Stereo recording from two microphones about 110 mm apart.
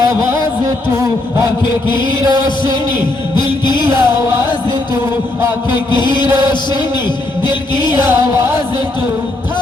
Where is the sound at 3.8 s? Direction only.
20° right (ahead or behind).